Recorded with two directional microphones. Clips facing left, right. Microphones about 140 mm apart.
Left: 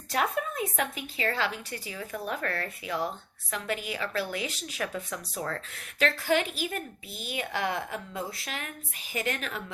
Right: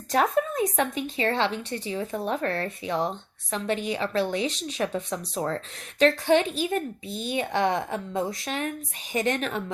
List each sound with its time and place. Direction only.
0.1 s a woman's voice: 35° right (ahead or behind)